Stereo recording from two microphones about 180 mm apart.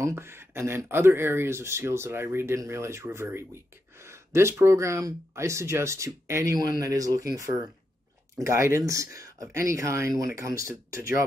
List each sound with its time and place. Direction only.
0.0 s speech: 15° right (ahead or behind)
8.4 s speech: 15° right (ahead or behind)